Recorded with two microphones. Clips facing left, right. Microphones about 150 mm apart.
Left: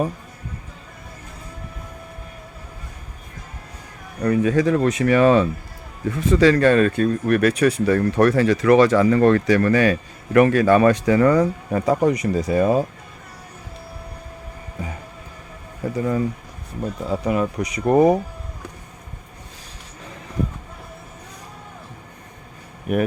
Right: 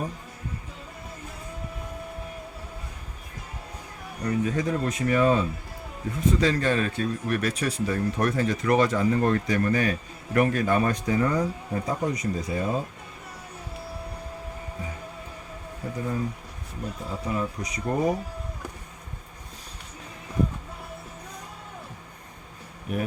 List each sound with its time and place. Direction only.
4.2 s speech: 85° left
17.1 s speech: 70° left (ahead or behind)
22.9 s speech: 65° left (ahead or behind)